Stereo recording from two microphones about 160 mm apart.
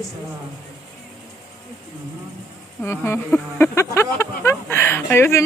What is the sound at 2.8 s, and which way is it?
Speech, 15° left (ahead or behind).